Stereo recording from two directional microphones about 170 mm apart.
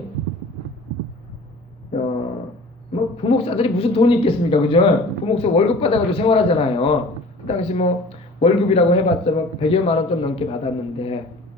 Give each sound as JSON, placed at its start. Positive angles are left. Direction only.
{"t": 2.9, "sound": "speech", "side_deg": 35}